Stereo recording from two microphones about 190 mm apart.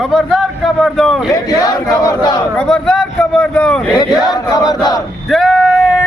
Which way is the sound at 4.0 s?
20° left (ahead or behind).